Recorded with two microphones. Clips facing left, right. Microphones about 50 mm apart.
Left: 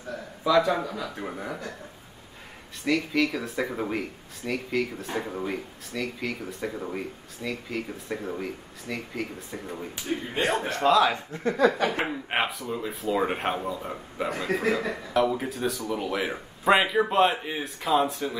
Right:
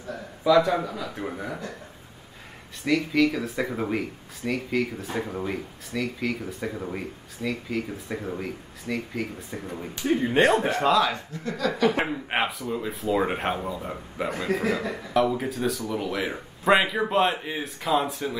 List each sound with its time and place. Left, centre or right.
0.4 s speech: centre
2.8 s speech: centre
11.4 s speech: left
12.1 s speech: centre